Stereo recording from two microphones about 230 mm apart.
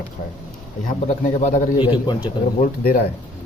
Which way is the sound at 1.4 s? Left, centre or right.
Left.